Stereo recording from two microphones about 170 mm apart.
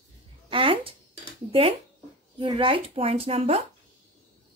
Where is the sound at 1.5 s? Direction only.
35° right (ahead or behind).